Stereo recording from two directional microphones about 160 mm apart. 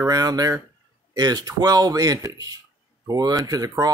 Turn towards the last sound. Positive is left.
turn(degrees=-20)  # may be behind; listen again after turning